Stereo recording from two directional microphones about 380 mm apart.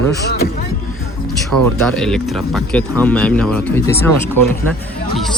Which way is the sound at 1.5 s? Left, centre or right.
Right.